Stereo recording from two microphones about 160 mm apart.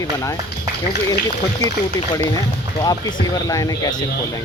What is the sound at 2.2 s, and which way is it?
Speech, 25° left (ahead or behind).